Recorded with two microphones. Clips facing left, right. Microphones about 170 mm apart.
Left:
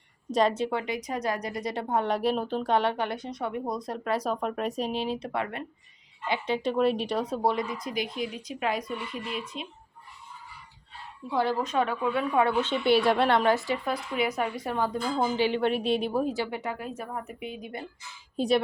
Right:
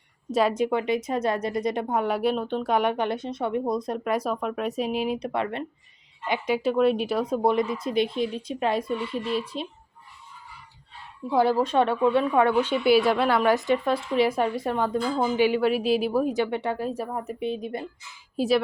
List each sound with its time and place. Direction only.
0.3 s a woman's voice: 5° right (ahead or behind)
2.7 s a woman's voice: 20° right (ahead or behind)
4.4 s a woman's voice: centre (ahead or behind); by 5.6 s 25° right (ahead or behind)
6.2 s a woman's voice: 15° right (ahead or behind)
7.5 s speech: 25° right (ahead or behind)
11.5 s speech: 30° right (ahead or behind)
12.6 s a woman's voice: 5° right (ahead or behind)
13.5 s speech: 20° right (ahead or behind)
15.4 s a woman's voice: 10° right (ahead or behind)
16.2 s speech: 20° right (ahead or behind)
18.3 s a woman's voice: centre (ahead or behind)